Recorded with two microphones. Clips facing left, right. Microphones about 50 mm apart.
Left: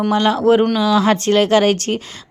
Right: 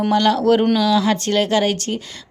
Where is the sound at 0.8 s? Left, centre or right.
Left.